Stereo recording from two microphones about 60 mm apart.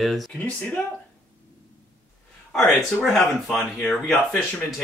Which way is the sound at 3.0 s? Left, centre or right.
Centre.